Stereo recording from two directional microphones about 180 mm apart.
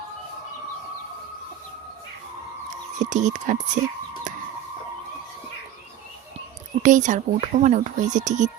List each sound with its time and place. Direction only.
3.0 s speech: 40° right (ahead or behind)
6.8 s speech: 45° right (ahead or behind)